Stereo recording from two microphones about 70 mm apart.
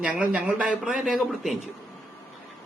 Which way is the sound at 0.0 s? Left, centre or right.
Centre.